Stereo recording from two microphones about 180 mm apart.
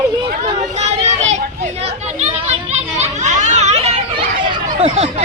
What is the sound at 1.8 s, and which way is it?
Children playing, 40° right (ahead or behind).